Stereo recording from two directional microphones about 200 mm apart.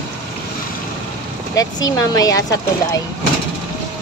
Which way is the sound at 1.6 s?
20° left (ahead or behind).